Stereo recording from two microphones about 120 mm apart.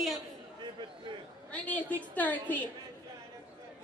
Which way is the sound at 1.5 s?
15° left (ahead or behind).